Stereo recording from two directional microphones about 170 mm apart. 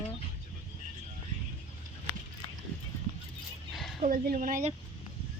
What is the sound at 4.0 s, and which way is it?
Speech, 50° right (ahead or behind).